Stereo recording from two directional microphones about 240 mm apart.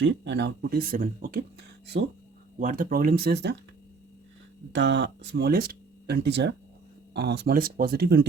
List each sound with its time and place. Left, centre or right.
0.0 s speech: right
2.6 s speech: right
4.7 s speech: right